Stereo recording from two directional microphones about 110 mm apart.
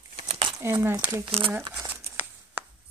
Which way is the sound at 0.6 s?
25° right (ahead or behind).